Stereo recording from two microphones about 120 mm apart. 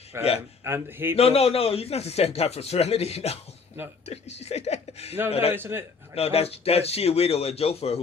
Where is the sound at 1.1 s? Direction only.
55° left (ahead or behind).